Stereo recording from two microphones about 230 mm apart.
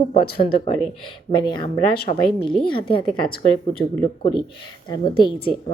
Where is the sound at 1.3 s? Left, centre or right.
Centre.